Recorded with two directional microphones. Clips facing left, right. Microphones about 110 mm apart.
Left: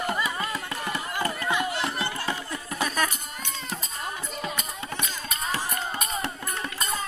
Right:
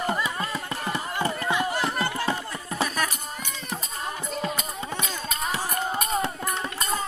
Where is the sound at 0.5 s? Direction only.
25° right (ahead or behind).